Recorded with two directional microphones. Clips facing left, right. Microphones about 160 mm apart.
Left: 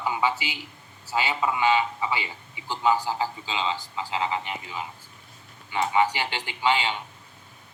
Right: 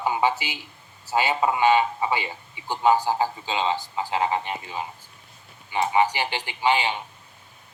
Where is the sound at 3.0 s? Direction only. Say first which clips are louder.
Right 4 dB; 45° right (ahead or behind).